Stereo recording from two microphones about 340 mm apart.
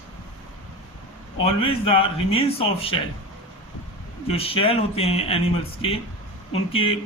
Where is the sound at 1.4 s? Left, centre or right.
Centre.